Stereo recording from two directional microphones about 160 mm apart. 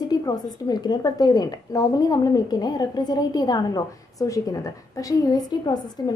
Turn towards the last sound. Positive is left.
turn(degrees=25)  # may be behind; listen again after turning